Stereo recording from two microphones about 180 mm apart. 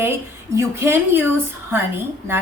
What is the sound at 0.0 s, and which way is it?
A woman's voice, 15° right (ahead or behind).